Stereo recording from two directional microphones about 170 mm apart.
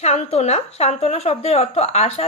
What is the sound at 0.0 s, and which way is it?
Speech, 35° left (ahead or behind).